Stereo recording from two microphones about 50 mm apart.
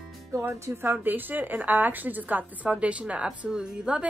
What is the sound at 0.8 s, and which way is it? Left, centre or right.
A woman's voice, right.